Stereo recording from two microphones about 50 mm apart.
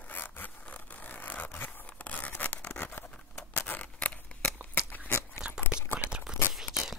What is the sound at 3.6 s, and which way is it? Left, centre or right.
Scissors, left.